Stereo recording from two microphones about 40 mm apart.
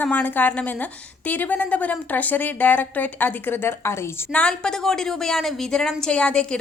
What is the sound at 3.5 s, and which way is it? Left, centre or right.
Speech, left.